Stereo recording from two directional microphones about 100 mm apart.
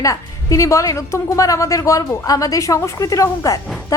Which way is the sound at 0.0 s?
35° left (ahead or behind).